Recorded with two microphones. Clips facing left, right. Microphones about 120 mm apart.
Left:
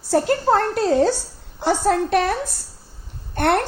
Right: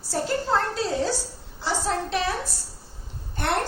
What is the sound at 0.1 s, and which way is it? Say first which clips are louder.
A woman's voice: left 7 dB; 60° left (ahead or behind).